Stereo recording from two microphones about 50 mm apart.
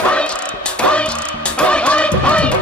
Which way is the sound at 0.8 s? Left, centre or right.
Left.